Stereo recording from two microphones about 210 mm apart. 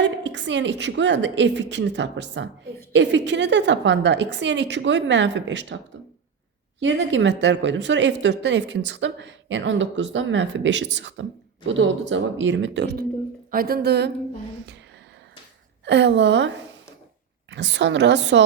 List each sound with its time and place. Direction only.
0.0 s speech: 60° right (ahead or behind)
15.8 s speech: 55° right (ahead or behind)